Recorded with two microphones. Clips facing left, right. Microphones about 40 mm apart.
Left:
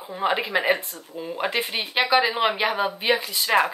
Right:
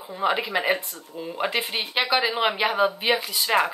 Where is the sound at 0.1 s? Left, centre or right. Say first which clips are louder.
Left 1 dB; centre.